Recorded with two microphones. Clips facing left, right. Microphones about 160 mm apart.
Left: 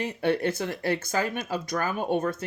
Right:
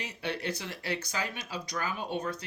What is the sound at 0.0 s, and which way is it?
Speech, 50° left (ahead or behind).